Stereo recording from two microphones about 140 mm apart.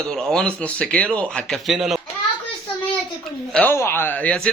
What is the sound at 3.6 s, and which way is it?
Speech, 15° left (ahead or behind).